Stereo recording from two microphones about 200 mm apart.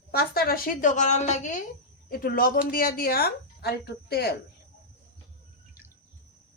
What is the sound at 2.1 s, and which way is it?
Speech, 50° left (ahead or behind).